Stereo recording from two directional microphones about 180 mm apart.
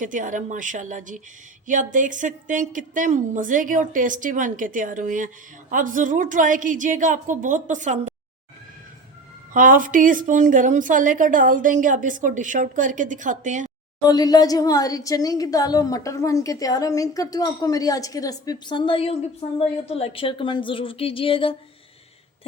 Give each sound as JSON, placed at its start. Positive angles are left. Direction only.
{"t": 0.0, "sound": "a woman's voice", "side_deg": -45}
{"t": 9.5, "sound": "a woman's voice", "side_deg": -50}
{"t": 14.0, "sound": "a woman's voice", "side_deg": 20}